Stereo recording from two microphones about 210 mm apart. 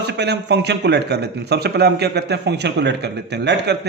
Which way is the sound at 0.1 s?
55° right (ahead or behind).